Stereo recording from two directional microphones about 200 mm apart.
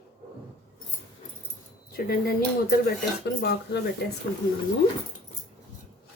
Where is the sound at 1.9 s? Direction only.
50° left (ahead or behind).